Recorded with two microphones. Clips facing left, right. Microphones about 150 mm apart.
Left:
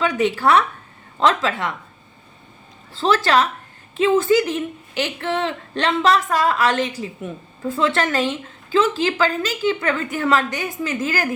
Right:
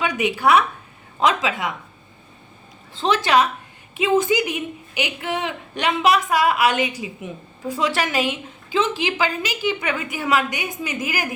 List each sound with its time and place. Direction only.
0.0 s a woman's voice: 15° right (ahead or behind)
2.9 s a woman's voice: 20° right (ahead or behind)